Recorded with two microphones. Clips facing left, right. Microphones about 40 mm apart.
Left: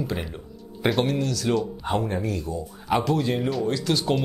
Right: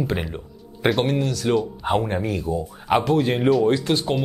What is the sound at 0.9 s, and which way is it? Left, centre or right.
Speech, centre.